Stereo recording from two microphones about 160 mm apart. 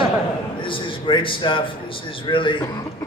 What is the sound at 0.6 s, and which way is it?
A man's voice, 30° left (ahead or behind).